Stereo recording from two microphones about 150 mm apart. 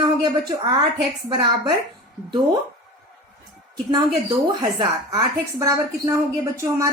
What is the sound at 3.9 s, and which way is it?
A woman's voice, 25° right (ahead or behind).